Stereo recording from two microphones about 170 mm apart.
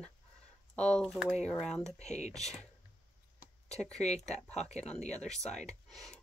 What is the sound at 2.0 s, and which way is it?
Speech, 40° left (ahead or behind).